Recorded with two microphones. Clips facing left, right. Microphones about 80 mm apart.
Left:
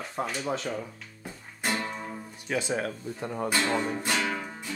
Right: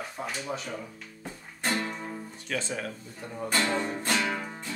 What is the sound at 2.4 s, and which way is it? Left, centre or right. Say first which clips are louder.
Speech: left 3 dB; centre.